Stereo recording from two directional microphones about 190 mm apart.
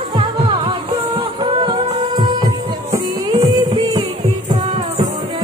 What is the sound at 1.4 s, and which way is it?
Music, 25° right (ahead or behind).